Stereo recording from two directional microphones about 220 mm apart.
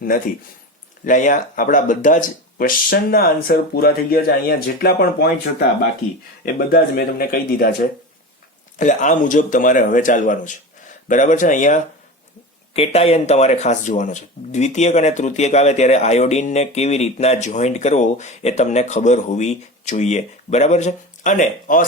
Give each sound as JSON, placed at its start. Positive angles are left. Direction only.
{"t": 1.0, "sound": "speech", "side_deg": 35}
{"t": 6.4, "sound": "speech", "side_deg": 45}
{"t": 8.8, "sound": "speech", "side_deg": 35}